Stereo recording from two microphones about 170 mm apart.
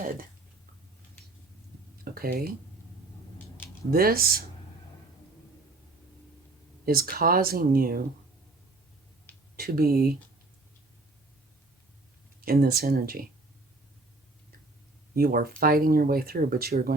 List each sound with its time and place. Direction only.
0.0 s speech: 55° right (ahead or behind)
2.1 s speech: 60° right (ahead or behind)
3.9 s speech: 60° right (ahead or behind)
6.8 s speech: 60° right (ahead or behind)
9.6 s speech: 60° right (ahead or behind)
12.4 s speech: 60° right (ahead or behind)
15.1 s speech: 60° right (ahead or behind)